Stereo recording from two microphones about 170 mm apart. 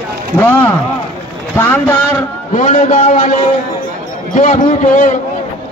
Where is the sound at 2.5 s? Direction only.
45° left (ahead or behind).